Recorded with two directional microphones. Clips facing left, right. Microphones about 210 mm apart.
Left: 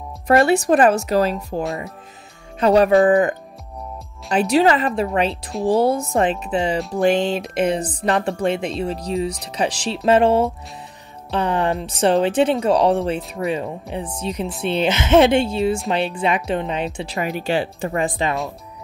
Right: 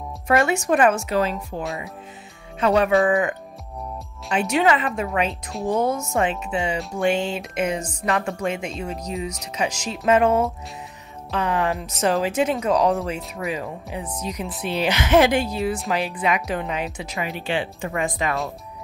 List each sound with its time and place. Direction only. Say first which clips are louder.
0.3 s speech: left 5 dB; 35° left (ahead or behind)
2.6 s speech: left 4 dB; 35° left (ahead or behind)
17.2 s speech: left 4 dB; 40° left (ahead or behind)